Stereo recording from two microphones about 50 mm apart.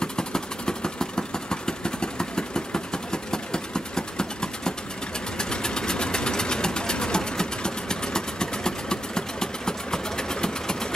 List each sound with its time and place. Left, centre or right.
0.0 s vehicle: centre
5.4 s sewing machine: centre